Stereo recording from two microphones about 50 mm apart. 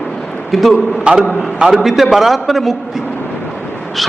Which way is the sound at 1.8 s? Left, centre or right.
Centre.